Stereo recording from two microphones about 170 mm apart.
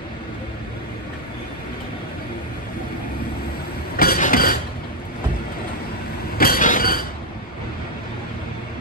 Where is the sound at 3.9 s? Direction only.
60° left (ahead or behind).